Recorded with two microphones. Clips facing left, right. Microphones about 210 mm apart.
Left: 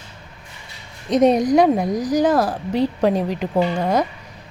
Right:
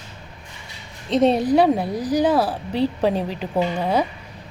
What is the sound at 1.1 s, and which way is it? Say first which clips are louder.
Speech: left 2 dB; 15° left (ahead or behind).